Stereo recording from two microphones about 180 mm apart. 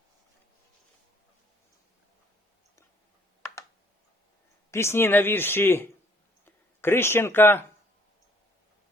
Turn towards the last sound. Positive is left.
turn(degrees=10)  # may be behind; listen again after turning